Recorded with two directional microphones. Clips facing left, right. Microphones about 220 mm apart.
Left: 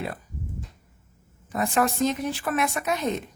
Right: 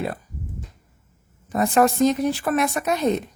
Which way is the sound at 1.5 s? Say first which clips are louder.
Right 6 dB; 40° right (ahead or behind).